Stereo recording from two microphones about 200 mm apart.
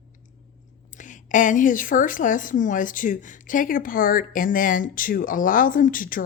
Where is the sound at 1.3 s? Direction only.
40° left (ahead or behind).